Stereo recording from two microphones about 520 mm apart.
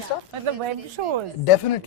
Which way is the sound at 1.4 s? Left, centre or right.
Left.